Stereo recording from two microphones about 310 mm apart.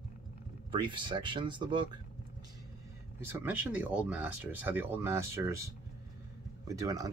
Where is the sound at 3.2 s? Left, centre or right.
Centre.